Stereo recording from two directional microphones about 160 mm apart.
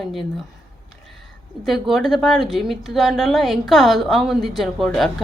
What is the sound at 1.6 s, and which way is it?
Speech, centre (ahead or behind).